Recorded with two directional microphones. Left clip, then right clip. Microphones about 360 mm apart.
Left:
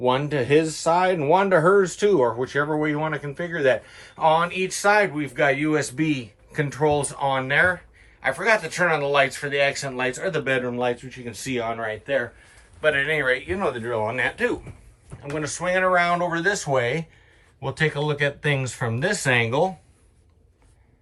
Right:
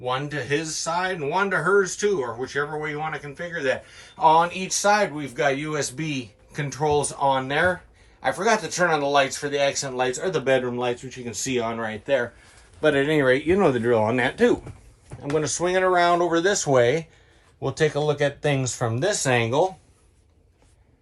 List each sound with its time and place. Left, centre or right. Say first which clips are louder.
0.0 s speech: left 5 dB; centre